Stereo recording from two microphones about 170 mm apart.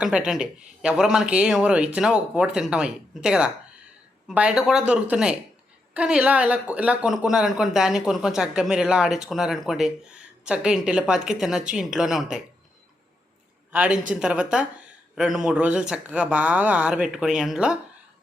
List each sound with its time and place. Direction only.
0.0 s speech: 5° right (ahead or behind)
13.7 s a woman's voice: 10° right (ahead or behind)